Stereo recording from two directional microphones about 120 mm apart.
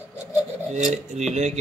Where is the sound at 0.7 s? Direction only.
85° right.